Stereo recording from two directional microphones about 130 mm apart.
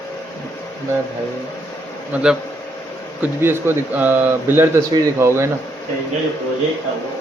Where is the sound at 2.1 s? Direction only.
5° right (ahead or behind).